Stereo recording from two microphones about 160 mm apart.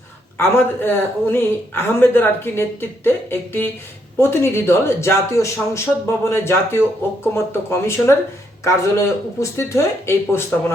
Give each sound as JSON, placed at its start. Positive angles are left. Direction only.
{"t": 0.3, "sound": "speech", "side_deg": 15}